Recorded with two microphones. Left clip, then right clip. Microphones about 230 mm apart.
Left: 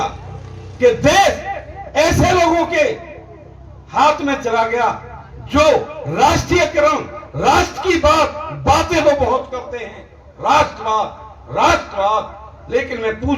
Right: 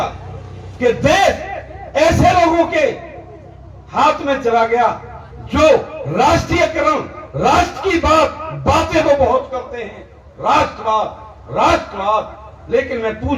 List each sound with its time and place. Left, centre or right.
0.8 s a man's voice: left
3.9 s a man's voice: left
6.1 s a man's voice: left